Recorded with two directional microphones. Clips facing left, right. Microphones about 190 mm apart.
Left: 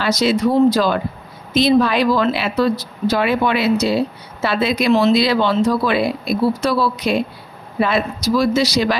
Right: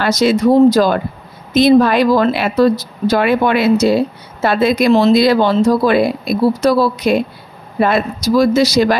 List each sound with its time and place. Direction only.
0.0 s a woman's voice: 50° right (ahead or behind)